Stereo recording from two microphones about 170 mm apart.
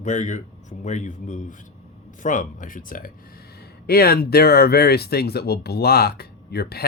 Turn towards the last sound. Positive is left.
turn(degrees=65)  # may be behind; listen again after turning